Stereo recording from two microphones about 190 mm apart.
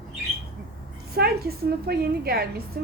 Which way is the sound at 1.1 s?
55° right (ahead or behind).